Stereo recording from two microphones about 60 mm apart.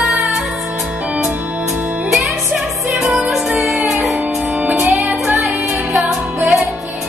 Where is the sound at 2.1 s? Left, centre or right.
Centre.